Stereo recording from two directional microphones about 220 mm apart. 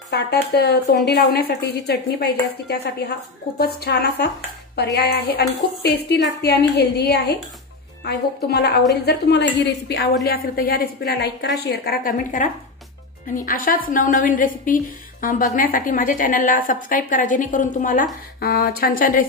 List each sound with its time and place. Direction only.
0.1 s a woman's voice: 50° left (ahead or behind)